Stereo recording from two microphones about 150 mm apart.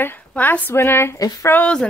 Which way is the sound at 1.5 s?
5° left (ahead or behind).